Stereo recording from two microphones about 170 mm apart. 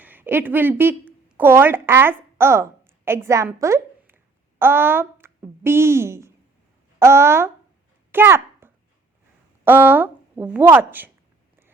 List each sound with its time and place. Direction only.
0.0 s a woman's voice: 10° right (ahead or behind)
8.1 s a sound: 10° right (ahead or behind)
9.6 s a woman's voice: 10° right (ahead or behind)